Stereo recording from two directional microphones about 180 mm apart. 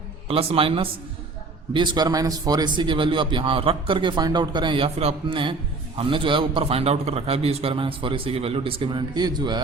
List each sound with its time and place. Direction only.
0.3 s a man's voice: 30° right (ahead or behind)